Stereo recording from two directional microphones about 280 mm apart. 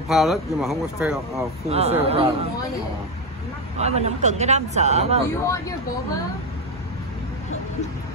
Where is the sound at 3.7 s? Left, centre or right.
Right.